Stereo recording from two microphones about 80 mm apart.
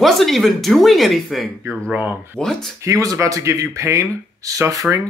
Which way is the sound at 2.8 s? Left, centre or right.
Right.